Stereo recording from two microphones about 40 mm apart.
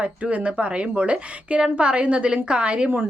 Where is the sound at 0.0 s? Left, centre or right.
Right.